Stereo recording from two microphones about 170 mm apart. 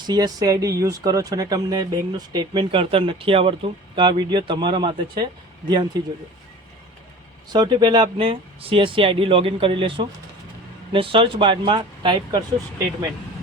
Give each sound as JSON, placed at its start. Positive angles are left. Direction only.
{"t": 0.0, "sound": "speech", "side_deg": -25}
{"t": 7.5, "sound": "speech", "side_deg": -25}